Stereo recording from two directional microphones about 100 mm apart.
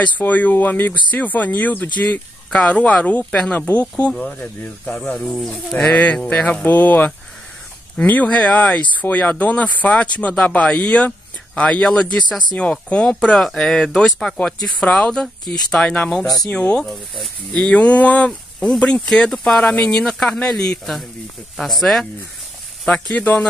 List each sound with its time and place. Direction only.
0.0 s speech: 15° left (ahead or behind)